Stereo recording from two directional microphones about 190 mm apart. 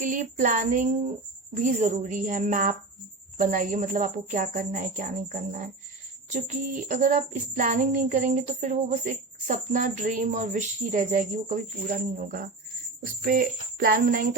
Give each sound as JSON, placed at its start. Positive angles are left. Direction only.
{"t": 0.0, "sound": "a woman's voice", "side_deg": -45}
{"t": 6.3, "sound": "child singing", "side_deg": -40}
{"t": 13.0, "sound": "a woman's voice", "side_deg": -50}